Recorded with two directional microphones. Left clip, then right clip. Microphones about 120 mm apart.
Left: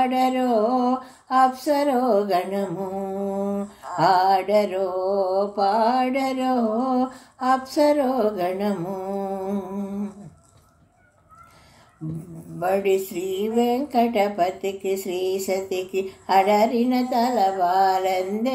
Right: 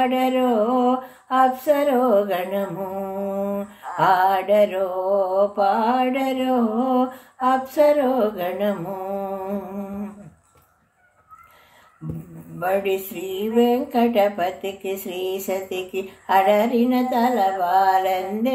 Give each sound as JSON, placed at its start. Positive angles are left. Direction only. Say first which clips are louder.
{"t": 0.0, "sound": "a sound", "louder": "right 1 dB", "side_deg": 30}
{"t": 5.3, "sound": "mantra", "louder": "right 2 dB", "side_deg": 40}
{"t": 12.5, "sound": "mantra", "louder": "left 1 dB", "side_deg": 35}